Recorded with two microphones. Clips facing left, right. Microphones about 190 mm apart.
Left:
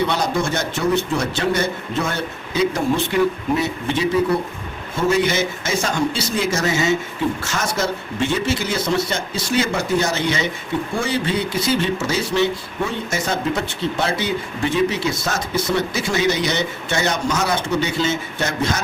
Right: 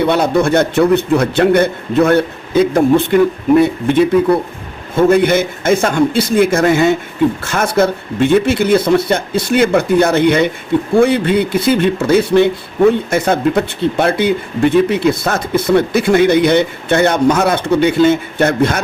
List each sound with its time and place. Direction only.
0.0 s speech: 60° right (ahead or behind)